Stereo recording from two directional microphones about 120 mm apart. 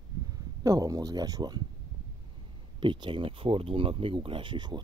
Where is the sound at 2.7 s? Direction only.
45° right (ahead or behind).